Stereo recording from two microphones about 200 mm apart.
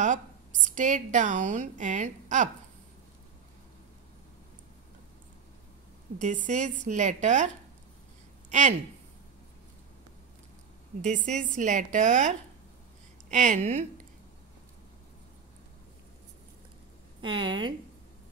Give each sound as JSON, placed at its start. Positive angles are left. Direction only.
{"t": 0.7, "sound": "a woman's voice", "side_deg": -40}
{"t": 6.1, "sound": "a woman's voice", "side_deg": -40}
{"t": 10.9, "sound": "a woman's voice", "side_deg": -30}
{"t": 17.2, "sound": "speech", "side_deg": -25}